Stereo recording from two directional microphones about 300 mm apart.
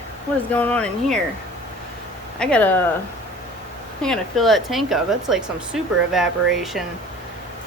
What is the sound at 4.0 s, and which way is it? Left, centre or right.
Speech, centre.